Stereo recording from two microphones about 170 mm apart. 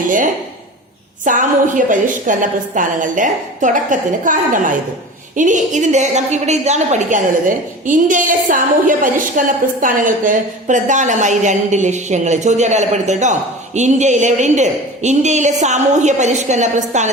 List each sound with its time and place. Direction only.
1.2 s a woman's voice: 50° right (ahead or behind)